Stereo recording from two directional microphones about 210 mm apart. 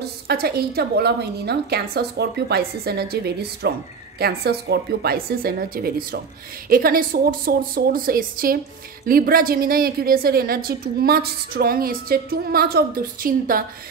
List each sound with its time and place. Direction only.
0.3 s a woman's voice: 50° right (ahead or behind)